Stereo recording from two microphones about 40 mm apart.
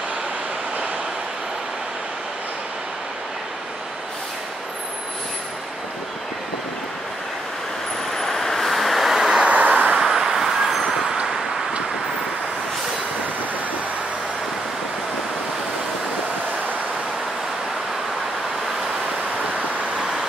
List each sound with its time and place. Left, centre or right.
8.2 s vehicle: centre
9.4 s vehicle: right
9.9 s vehicle: centre